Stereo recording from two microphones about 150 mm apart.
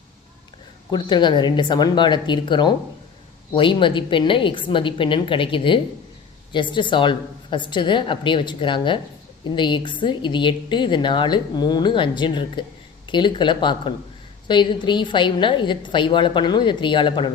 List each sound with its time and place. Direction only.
0.9 s a woman's voice: 30° left (ahead or behind)